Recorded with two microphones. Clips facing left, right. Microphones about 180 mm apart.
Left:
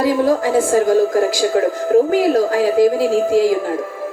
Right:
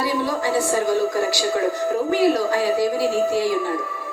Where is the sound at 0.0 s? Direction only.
50° left (ahead or behind).